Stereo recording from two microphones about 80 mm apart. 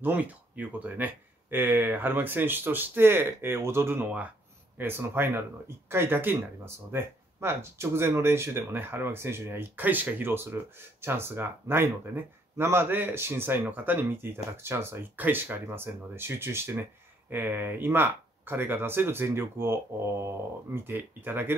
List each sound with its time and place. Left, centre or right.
0.0 s speech: right